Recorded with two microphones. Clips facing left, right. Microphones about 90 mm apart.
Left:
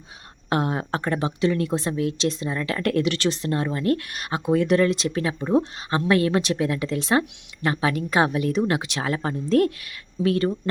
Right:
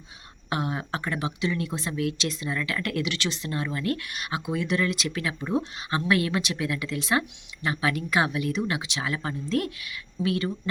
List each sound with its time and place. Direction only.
0.5 s speech: 40° left (ahead or behind)